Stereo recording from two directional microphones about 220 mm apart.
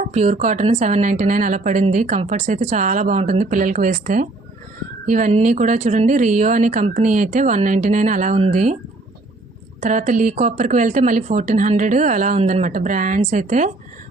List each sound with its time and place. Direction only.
0.1 s speech: 30° right (ahead or behind)
9.8 s speech: 35° right (ahead or behind)